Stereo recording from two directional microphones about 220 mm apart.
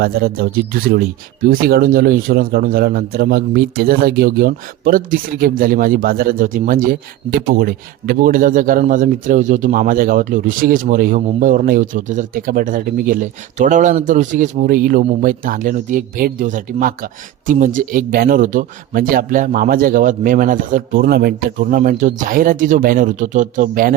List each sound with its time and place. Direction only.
0.0 s a man's voice: 45° right (ahead or behind)